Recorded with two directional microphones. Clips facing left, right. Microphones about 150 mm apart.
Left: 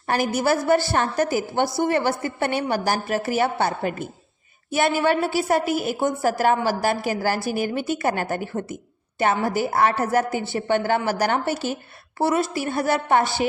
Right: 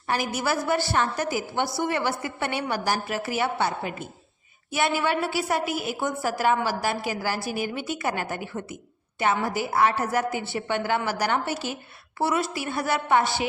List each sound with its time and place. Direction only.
0.1 s a woman's voice: 50° left (ahead or behind)